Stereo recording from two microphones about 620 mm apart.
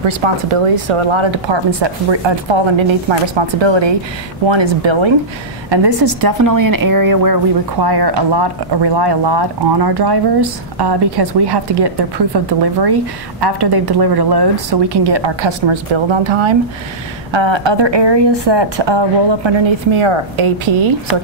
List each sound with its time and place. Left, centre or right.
0.0 s a woman's voice: right